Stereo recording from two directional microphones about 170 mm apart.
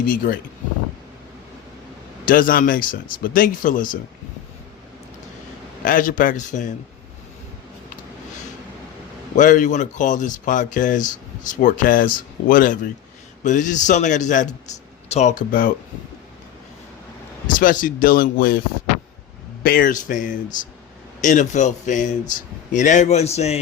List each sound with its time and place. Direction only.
0.0 s speech: 55° left (ahead or behind)
2.2 s speech: 55° left (ahead or behind)
5.8 s speech: 50° left (ahead or behind)
9.3 s speech: 50° left (ahead or behind)
17.4 s speech: 55° left (ahead or behind)
19.6 s speech: 60° left (ahead or behind); by 23.6 s 40° left (ahead or behind)